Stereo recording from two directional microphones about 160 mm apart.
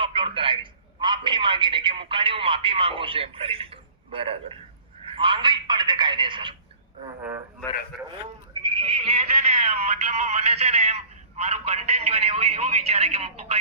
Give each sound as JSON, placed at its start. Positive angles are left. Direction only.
{"t": 0.0, "sound": "a sound", "side_deg": -35}
{"t": 5.0, "sound": "a man's voice", "side_deg": -30}
{"t": 8.6, "sound": "speech", "side_deg": -30}